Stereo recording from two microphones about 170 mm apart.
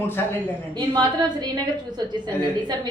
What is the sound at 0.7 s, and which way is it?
A woman's voice, 25° right (ahead or behind).